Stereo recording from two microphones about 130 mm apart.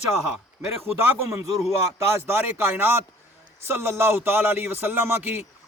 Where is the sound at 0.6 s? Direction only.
20° right (ahead or behind).